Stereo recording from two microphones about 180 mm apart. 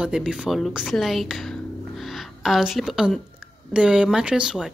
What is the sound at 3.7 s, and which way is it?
Speech, 5° right (ahead or behind).